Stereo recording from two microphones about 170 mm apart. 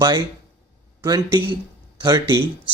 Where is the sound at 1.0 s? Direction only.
25° right (ahead or behind).